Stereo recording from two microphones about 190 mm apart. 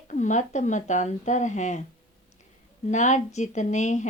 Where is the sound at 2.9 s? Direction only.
40° left (ahead or behind).